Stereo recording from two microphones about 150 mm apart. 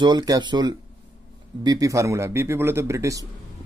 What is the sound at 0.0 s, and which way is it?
Speech, 30° right (ahead or behind).